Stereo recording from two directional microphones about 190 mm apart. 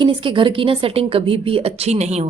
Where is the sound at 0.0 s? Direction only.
25° right (ahead or behind).